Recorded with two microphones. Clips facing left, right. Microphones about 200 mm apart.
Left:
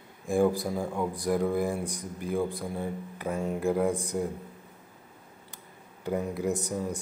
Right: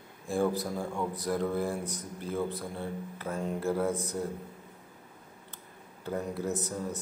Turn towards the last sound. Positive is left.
turn(degrees=15)  # may be behind; listen again after turning